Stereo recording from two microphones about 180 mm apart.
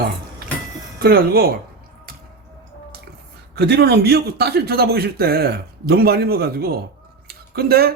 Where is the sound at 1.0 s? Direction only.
60° right (ahead or behind).